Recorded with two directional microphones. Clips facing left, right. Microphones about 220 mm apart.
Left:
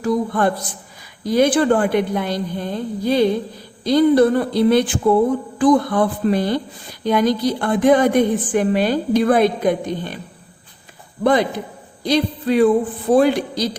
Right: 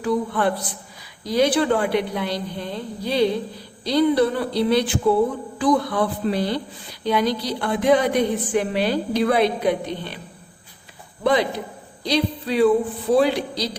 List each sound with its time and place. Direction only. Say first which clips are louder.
0.0 s a woman's voice: left 3 dB; 45° left (ahead or behind)
11.2 s a woman's voice: left 3 dB; 50° left (ahead or behind)